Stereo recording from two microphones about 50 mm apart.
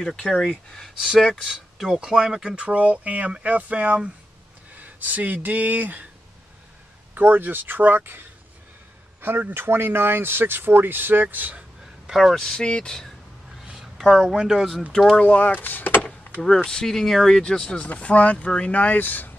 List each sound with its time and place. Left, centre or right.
0.0 s speech: centre
2.5 s speech: right
7.2 s speech: right
12.1 s speech: centre
12.4 s speech: centre
13.7 s speech: centre
14.9 s speech: centre
15.2 s speech: left
15.6 s speech: left
16.4 s speech: centre
17.9 s speech: left